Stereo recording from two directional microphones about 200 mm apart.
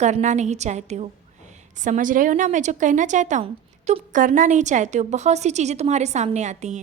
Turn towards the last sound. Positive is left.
turn(degrees=-35)  # may be behind; listen again after turning